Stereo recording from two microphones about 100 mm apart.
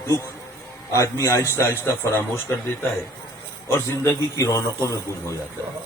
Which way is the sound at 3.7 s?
25° left (ahead or behind).